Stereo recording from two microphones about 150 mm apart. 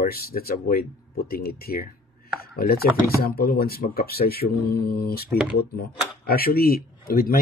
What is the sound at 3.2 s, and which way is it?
Speech, 90° left.